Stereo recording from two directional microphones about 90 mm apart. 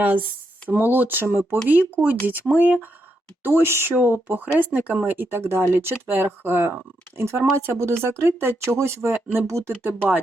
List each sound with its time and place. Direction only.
0.7 s speech: 20° right (ahead or behind)